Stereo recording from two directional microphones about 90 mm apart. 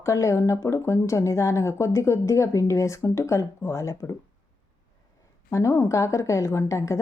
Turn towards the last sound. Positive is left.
turn(degrees=35)  # may be behind; listen again after turning